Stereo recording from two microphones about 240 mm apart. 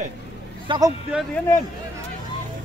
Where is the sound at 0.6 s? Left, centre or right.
Centre.